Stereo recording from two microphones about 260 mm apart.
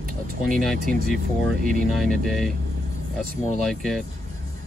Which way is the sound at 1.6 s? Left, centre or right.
Right.